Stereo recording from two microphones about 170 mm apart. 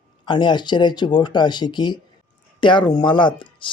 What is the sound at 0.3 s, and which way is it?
Speech, 25° left (ahead or behind).